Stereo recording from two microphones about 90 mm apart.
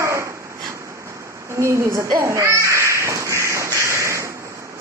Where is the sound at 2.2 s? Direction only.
35° right (ahead or behind).